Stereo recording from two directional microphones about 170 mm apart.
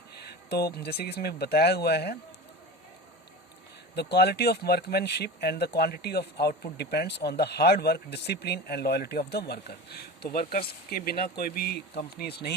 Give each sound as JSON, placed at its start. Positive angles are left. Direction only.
{"t": 0.1, "sound": "speech", "side_deg": 70}
{"t": 3.9, "sound": "speech", "side_deg": 70}